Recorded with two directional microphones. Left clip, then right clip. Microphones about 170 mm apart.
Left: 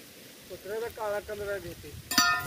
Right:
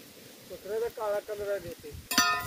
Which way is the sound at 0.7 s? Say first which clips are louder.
Right 2 dB; 50° right (ahead or behind).